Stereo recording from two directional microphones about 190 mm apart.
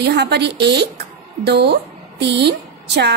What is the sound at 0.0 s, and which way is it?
A woman's voice, 60° right (ahead or behind).